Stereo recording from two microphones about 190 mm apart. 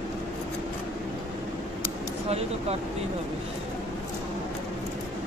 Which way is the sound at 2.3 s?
35° right (ahead or behind).